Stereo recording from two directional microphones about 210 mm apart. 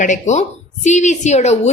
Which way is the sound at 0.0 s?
35° left (ahead or behind).